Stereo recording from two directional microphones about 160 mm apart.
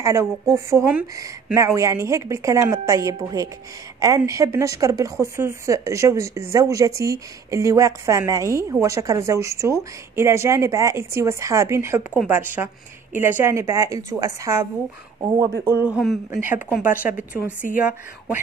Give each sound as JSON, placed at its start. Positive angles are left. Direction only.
{"t": 0.0, "sound": "a woman's voice", "side_deg": -20}
{"t": 15.9, "sound": "speech", "side_deg": 0}
{"t": 16.3, "sound": "a woman's voice", "side_deg": -15}